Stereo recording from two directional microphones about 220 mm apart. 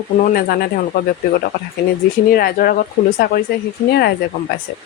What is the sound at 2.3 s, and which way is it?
Speech, 40° left (ahead or behind).